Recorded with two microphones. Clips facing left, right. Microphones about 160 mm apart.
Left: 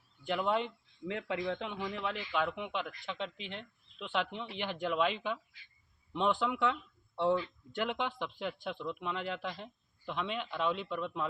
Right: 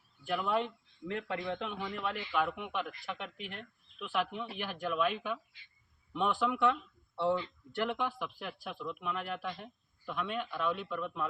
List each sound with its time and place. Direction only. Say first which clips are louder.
0.3 s speech: even; 20° left (ahead or behind)
6.1 s speech: even; 20° left (ahead or behind)